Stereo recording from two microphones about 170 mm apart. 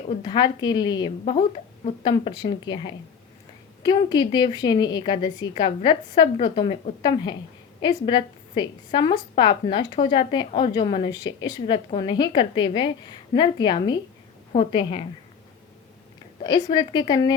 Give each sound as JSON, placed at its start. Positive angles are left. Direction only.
{"t": 0.1, "sound": "a woman's voice", "side_deg": 30}
{"t": 1.2, "sound": "a woman's voice", "side_deg": 35}
{"t": 16.4, "sound": "a woman's voice", "side_deg": 25}